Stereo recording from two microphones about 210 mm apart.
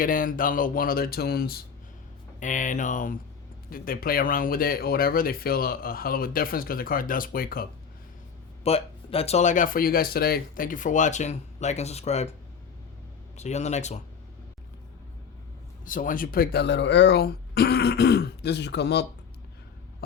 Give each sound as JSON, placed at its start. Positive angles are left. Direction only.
{"t": 0.0, "sound": "speech", "side_deg": 40}
{"t": 8.6, "sound": "speech", "side_deg": 30}
{"t": 13.3, "sound": "speech", "side_deg": 35}
{"t": 15.8, "sound": "speech", "side_deg": 40}